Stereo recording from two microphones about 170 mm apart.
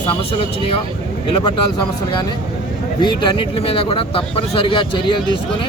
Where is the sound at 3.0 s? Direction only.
25° left (ahead or behind).